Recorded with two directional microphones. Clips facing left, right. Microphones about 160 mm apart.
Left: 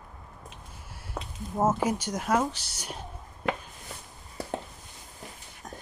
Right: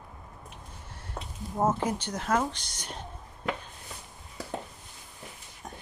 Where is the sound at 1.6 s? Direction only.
10° left (ahead or behind).